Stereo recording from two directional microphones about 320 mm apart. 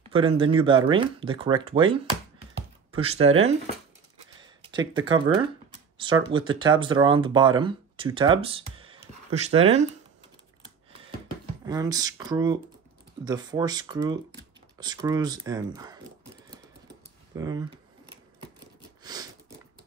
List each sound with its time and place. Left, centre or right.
0.1 s speech: centre
2.9 s a sound: centre
3.2 s speech: right
4.4 s speech: centre
11.6 s speech: centre
17.3 s speech: centre